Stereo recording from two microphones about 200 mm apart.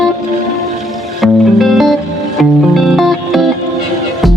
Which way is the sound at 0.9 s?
Centre (ahead or behind).